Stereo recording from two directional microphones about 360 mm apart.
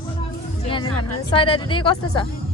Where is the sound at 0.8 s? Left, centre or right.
Left.